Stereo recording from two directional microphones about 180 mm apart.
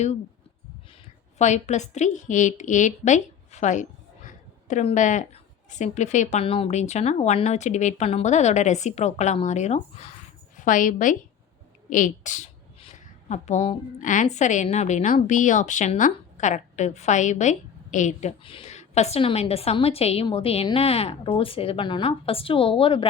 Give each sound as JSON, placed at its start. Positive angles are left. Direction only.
{"t": 1.4, "sound": "a woman's voice", "side_deg": 40}